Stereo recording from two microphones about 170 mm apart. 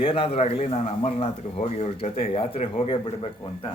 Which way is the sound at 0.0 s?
35° left (ahead or behind).